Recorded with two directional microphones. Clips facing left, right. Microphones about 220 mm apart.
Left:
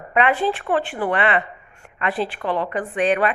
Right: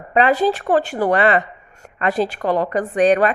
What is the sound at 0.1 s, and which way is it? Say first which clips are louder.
A woman's voice: right 4 dB; 35° right (ahead or behind).